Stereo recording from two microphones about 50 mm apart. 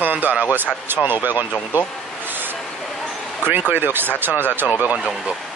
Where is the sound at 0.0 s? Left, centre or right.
Right.